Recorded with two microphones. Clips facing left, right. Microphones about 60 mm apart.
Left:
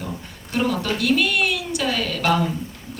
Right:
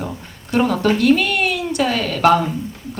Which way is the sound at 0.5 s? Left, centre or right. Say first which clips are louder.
Right 6 dB; right.